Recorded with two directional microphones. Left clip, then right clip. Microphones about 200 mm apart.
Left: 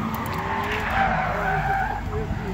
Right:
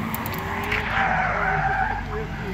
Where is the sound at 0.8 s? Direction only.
50° left (ahead or behind).